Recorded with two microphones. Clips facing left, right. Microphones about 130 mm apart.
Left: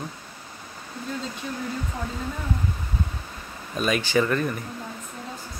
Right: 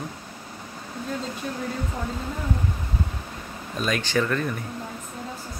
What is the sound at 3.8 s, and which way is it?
Speech, 5° left (ahead or behind).